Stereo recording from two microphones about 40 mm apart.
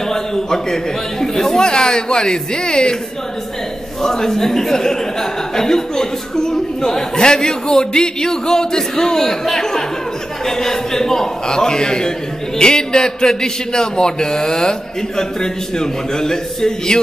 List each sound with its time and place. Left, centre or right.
0.1 s speech: centre
1.7 s speech: centre
4.0 s speech: centre